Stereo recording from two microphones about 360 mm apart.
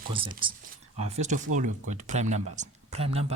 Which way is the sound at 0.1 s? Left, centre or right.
Centre.